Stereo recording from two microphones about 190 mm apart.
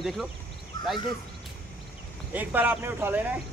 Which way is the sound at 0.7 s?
20° left (ahead or behind).